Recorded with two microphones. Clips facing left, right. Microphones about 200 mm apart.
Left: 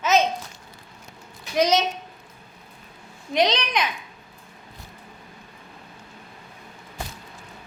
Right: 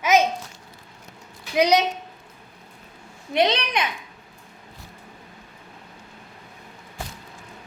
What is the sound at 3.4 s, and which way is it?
Speech, 55° right (ahead or behind).